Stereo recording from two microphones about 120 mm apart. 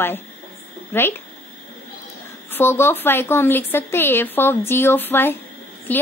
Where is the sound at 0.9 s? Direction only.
20° left (ahead or behind).